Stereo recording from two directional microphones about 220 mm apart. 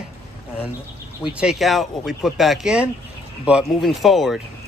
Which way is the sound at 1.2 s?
5° right (ahead or behind).